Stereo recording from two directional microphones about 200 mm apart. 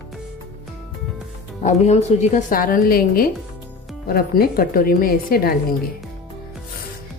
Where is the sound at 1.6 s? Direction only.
35° left (ahead or behind).